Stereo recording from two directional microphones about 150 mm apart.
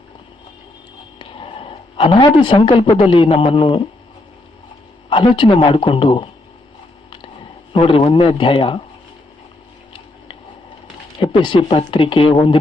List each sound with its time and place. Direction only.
1.2 s a sound: 35° left (ahead or behind)
3.0 s speech: 35° left (ahead or behind)
5.0 s speech: 35° left (ahead or behind)
7.7 s speech: 35° left (ahead or behind)
11.2 s speech: 35° left (ahead or behind)